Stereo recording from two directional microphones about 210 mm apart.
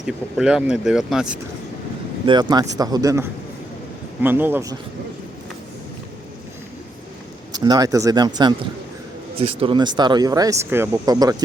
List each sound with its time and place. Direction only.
0.0 s speech: 5° right (ahead or behind)
2.2 s speech: 20° right (ahead or behind)
7.5 s speech: 20° right (ahead or behind)